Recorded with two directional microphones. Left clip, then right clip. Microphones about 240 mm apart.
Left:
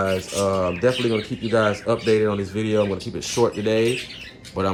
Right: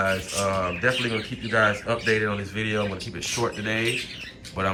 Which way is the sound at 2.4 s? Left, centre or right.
Left.